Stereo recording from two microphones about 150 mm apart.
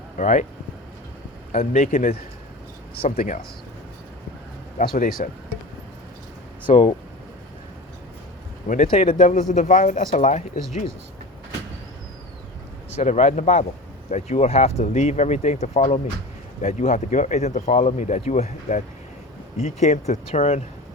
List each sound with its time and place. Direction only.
0.2 s speech: 55° left (ahead or behind)
1.5 s speech: 45° left (ahead or behind)
1.9 s speech: 70° left (ahead or behind)
2.9 s speech: 85° left
5.2 s speech: 65° left (ahead or behind)
6.7 s speech: 35° left (ahead or behind)
8.6 s speech: 60° left (ahead or behind)
8.9 s speech: 40° left (ahead or behind)
9.1 s speech: 65° left (ahead or behind)
13.0 s speech: 50° left (ahead or behind)